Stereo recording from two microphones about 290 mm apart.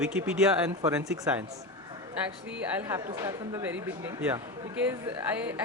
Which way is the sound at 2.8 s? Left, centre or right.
Centre.